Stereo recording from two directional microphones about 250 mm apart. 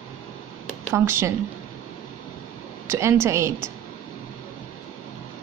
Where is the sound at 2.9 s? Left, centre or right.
Centre.